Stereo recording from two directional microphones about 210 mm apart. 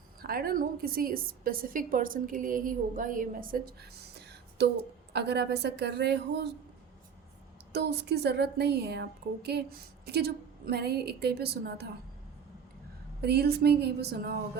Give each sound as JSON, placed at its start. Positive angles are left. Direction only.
{"t": 0.2, "sound": "a woman's voice", "side_deg": -45}
{"t": 7.7, "sound": "a woman's voice", "side_deg": -50}
{"t": 13.2, "sound": "a woman's voice", "side_deg": -50}